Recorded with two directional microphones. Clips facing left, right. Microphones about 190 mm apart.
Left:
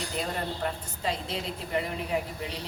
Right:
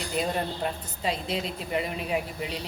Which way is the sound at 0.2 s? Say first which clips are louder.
Right 4 dB; 15° right (ahead or behind).